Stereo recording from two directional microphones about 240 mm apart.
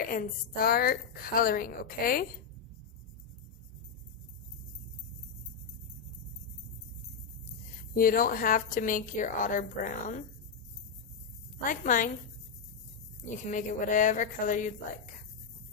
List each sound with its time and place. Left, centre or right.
0.0 s a woman's voice: left
7.9 s a woman's voice: left
11.6 s a woman's voice: left
13.3 s a woman's voice: left